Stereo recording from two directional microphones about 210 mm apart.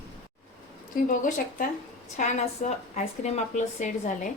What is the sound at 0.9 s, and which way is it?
A woman's voice, 40° left (ahead or behind).